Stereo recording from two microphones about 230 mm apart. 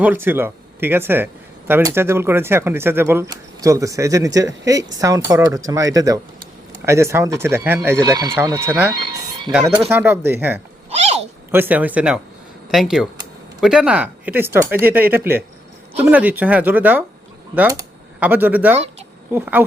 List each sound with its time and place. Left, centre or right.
0.0 s speech: centre
10.8 s a sound: right
11.5 s speech: centre